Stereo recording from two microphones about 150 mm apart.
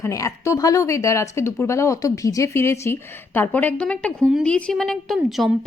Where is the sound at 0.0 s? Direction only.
20° left (ahead or behind).